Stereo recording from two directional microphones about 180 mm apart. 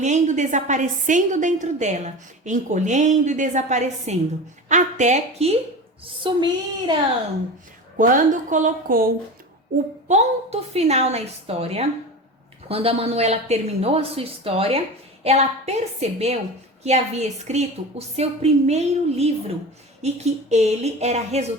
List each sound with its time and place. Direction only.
0.0 s a woman's voice: 40° right (ahead or behind)
6.2 s speech: 25° right (ahead or behind)
7.9 s a woman's voice: 50° right (ahead or behind)
10.1 s a woman's voice: 40° right (ahead or behind)